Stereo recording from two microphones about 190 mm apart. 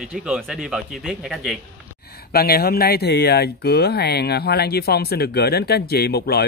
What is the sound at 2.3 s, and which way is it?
Speech, 55° left (ahead or behind).